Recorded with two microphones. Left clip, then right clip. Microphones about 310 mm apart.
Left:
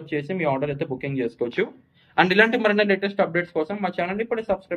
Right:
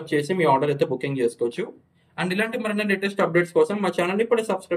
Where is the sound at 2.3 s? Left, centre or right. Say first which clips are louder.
Left 5 dB; centre.